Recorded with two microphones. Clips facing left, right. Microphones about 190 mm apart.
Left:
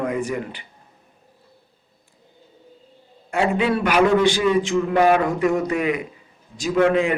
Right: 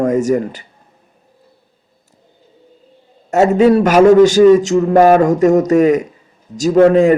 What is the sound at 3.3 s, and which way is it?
A man's voice, 40° right (ahead or behind).